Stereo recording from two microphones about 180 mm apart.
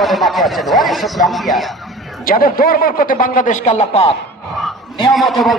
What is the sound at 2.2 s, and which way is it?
A man's voice, 55° left (ahead or behind).